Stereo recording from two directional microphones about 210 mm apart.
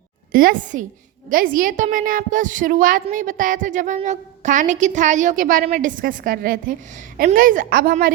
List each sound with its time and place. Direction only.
0.3 s a woman's voice: 40° right (ahead or behind)